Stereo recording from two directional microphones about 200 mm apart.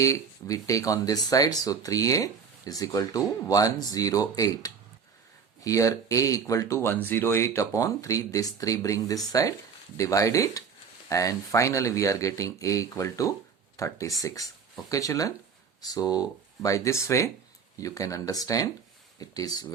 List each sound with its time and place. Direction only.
0.0 s speech: 15° left (ahead or behind)